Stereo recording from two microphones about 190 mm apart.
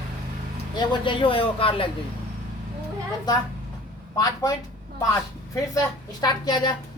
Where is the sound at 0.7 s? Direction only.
25° left (ahead or behind).